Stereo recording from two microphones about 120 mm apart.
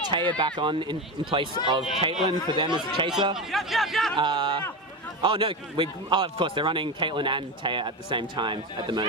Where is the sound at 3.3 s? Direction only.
Centre (ahead or behind).